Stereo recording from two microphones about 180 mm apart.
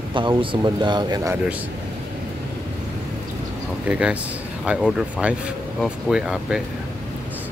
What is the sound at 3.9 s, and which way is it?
Speech, 5° right (ahead or behind).